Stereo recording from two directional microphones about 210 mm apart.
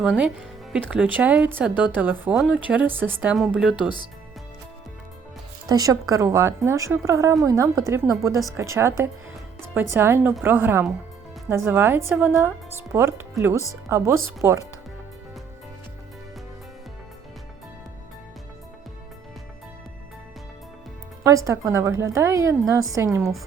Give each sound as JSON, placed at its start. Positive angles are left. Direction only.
{"t": 0.0, "sound": "speech", "side_deg": -5}
{"t": 3.8, "sound": "speech", "side_deg": 20}
{"t": 5.6, "sound": "speech", "side_deg": -15}
{"t": 21.2, "sound": "speech", "side_deg": -15}